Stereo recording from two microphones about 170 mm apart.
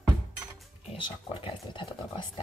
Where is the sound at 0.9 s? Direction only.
30° left (ahead or behind).